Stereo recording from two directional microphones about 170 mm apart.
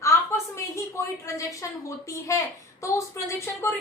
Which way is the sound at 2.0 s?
20° left (ahead or behind).